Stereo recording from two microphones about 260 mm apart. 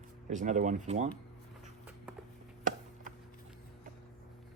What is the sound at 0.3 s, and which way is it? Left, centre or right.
Speech, right.